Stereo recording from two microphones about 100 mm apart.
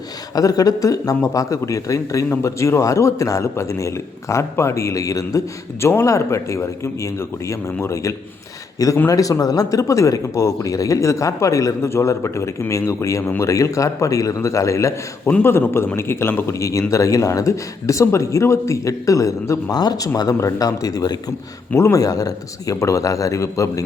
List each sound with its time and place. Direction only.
0.3 s a man's voice: 35° left (ahead or behind)